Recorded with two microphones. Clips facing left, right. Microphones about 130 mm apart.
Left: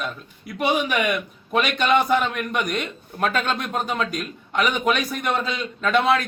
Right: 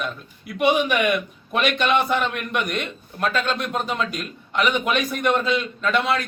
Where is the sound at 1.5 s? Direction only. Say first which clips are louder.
Left 1 dB; 40° left (ahead or behind).